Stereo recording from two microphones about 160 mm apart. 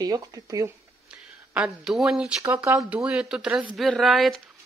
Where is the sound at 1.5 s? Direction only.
5° right (ahead or behind).